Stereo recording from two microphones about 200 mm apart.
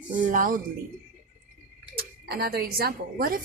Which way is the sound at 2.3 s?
50° right (ahead or behind).